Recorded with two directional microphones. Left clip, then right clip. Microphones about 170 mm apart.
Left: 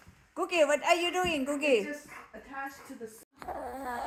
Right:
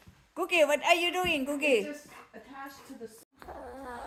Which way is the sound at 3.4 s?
35° left (ahead or behind).